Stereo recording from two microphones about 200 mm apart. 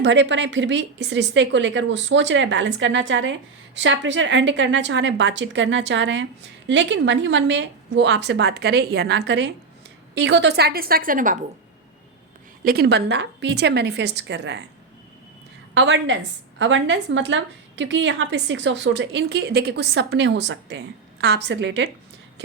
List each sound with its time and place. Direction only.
0.0 s a woman's voice: 65° right (ahead or behind); by 11.3 s 40° right (ahead or behind)
12.6 s a woman's voice: 50° right (ahead or behind)
15.7 s a woman's voice: 65° right (ahead or behind)